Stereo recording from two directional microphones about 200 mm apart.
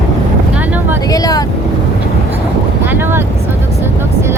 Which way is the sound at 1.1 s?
20° left (ahead or behind).